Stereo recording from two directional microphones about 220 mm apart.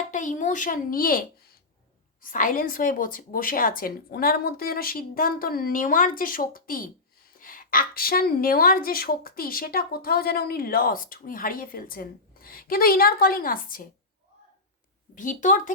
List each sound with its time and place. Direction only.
0.1 s a woman's voice: 35° left (ahead or behind)
2.2 s a woman's voice: 35° left (ahead or behind)
15.1 s a woman's voice: 35° left (ahead or behind)